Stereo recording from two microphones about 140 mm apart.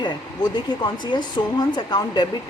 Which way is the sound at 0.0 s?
30° left (ahead or behind).